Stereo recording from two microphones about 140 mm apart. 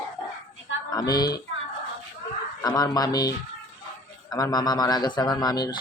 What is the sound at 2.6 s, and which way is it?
A man's voice, 30° left (ahead or behind).